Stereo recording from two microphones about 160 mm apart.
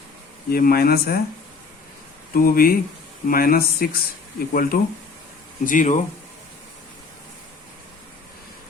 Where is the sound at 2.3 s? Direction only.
65° left (ahead or behind).